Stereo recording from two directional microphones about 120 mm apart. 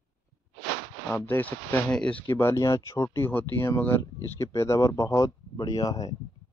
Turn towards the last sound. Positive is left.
turn(degrees=30)  # may be behind; listen again after turning